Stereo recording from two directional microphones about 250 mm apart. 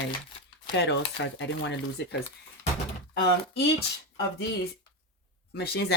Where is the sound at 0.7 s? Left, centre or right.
Left.